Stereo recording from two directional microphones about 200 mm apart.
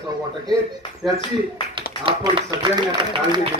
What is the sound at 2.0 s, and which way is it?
Speech, 20° right (ahead or behind).